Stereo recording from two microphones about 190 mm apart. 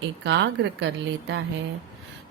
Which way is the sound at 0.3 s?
70° right (ahead or behind).